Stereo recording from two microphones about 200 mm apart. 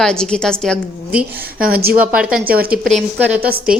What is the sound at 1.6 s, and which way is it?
Speech, 50° right (ahead or behind).